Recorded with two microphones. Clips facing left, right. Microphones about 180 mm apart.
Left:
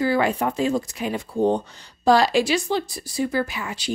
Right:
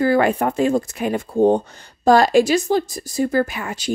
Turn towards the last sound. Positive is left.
turn(degrees=-50)  # may be behind; listen again after turning